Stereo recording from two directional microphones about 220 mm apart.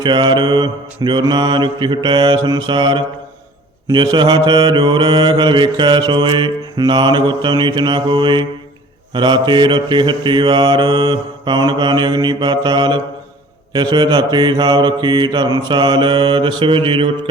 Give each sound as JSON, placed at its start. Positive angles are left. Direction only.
{"t": 0.0, "sound": "mantra", "side_deg": -20}